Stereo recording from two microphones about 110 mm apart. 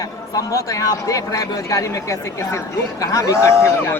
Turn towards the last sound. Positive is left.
turn(degrees=25)  # may be behind; listen again after turning